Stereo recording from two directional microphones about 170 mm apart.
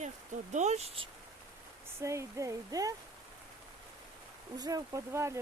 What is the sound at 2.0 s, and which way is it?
Speech, 15° right (ahead or behind).